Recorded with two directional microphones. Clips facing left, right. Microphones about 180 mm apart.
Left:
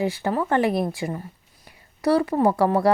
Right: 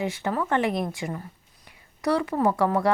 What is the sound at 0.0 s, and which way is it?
Speech, 35° left (ahead or behind).